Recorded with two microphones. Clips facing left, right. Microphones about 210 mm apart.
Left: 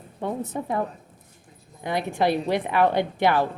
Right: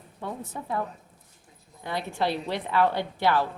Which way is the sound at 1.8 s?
15° left (ahead or behind).